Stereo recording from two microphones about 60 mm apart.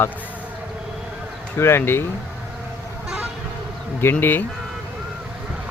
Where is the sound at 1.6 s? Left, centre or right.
Left.